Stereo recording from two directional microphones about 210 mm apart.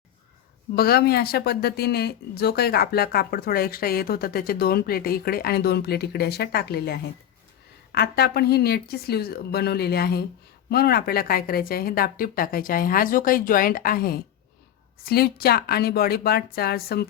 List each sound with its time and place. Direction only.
0.8 s speech: 45° left (ahead or behind)